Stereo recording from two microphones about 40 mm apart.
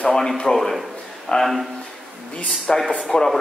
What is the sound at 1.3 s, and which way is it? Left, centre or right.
Speech, left.